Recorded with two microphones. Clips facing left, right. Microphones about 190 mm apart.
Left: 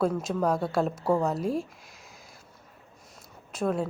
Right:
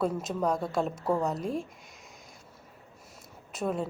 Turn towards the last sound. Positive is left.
turn(degrees=0)  # may be behind; listen again after turning